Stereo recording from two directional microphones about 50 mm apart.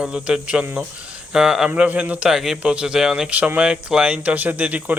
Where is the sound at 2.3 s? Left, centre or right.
Centre.